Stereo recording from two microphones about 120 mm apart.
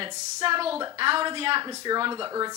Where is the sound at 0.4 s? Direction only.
50° right (ahead or behind).